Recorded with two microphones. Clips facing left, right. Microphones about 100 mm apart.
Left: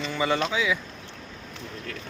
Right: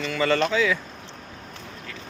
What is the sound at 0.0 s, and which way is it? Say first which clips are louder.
Speech: right 3 dB; 20° left (ahead or behind).